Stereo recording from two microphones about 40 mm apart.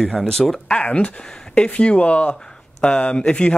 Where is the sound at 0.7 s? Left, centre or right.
Left.